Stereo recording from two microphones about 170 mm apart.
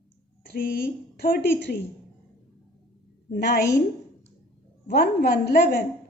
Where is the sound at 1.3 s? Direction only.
85° left.